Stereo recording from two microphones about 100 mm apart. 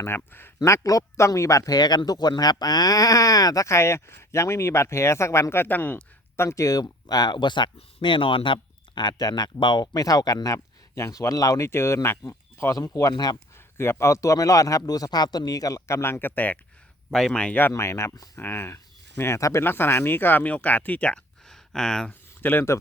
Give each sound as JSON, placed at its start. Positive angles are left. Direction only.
{"t": 0.0, "sound": "speech", "side_deg": 20}
{"t": 7.8, "sound": "speech", "side_deg": 65}
{"t": 9.0, "sound": "speech", "side_deg": 45}
{"t": 12.7, "sound": "speech", "side_deg": 40}
{"t": 13.7, "sound": "speech", "side_deg": 25}
{"t": 17.1, "sound": "speech", "side_deg": 5}
{"t": 21.5, "sound": "a sound", "side_deg": 5}
{"t": 22.4, "sound": "speech", "side_deg": 20}